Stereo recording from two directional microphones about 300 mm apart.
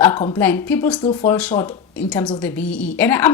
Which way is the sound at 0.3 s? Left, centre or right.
Centre.